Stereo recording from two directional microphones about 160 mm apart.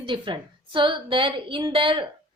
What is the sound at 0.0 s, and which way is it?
A woman's voice, 30° right (ahead or behind).